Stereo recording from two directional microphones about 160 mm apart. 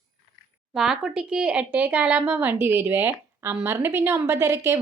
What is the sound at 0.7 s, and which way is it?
Speech, 5° right (ahead or behind).